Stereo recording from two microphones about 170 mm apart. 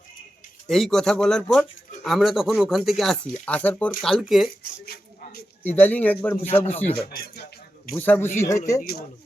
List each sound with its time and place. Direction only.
0.7 s speech: centre (ahead or behind)
4.9 s a sound: 65° left (ahead or behind)
5.6 s speech: 10° left (ahead or behind)
6.7 s speech: 40° left (ahead or behind)
7.1 s speech: 60° left (ahead or behind)
7.9 s speech: 10° left (ahead or behind)
8.8 s speech: 60° left (ahead or behind)